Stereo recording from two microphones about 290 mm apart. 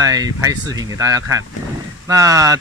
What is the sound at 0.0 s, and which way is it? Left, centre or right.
Speech, centre.